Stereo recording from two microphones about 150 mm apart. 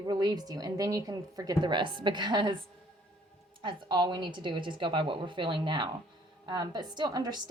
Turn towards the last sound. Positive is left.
turn(degrees=-25)  # may be behind; listen again after turning